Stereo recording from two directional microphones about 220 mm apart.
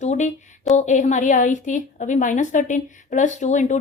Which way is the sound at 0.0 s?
30° left (ahead or behind).